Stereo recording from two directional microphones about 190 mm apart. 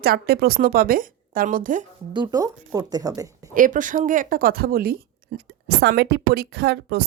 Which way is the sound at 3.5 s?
45° right (ahead or behind).